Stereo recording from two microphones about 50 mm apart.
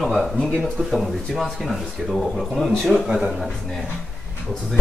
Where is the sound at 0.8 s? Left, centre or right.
Centre.